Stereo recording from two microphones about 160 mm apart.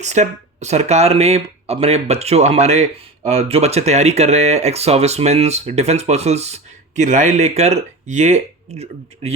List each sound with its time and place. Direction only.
0.0 s speech: 45° right (ahead or behind)